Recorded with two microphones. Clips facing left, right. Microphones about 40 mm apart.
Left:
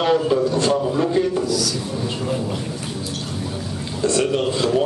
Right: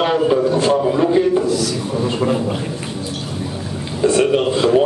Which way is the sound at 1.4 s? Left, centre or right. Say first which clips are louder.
Right 4 dB; right.